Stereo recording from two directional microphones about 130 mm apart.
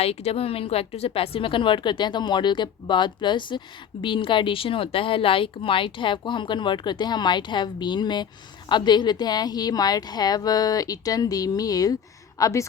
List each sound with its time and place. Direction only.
0.0 s a woman's voice: 50° left (ahead or behind); by 12.6 s 25° left (ahead or behind)